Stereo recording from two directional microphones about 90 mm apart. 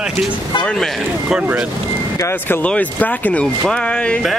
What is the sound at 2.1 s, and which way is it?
Speech, 30° left (ahead or behind).